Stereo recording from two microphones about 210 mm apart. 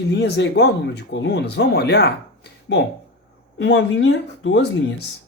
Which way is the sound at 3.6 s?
60° left (ahead or behind).